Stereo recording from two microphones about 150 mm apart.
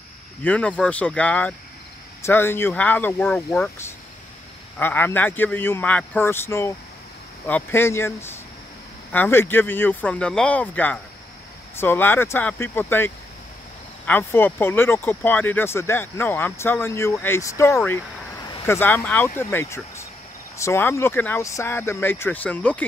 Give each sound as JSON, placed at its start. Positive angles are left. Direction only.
{"t": 0.4, "sound": "speech", "side_deg": 10}
{"t": 4.7, "sound": "speech", "side_deg": 15}